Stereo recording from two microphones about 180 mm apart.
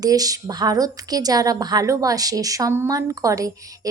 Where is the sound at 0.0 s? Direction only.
20° right (ahead or behind).